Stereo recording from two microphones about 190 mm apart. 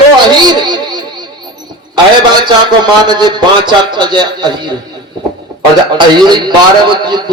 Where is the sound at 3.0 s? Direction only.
25° right (ahead or behind).